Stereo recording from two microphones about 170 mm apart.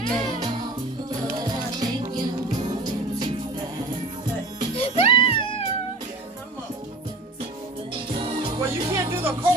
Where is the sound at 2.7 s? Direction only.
25° right (ahead or behind).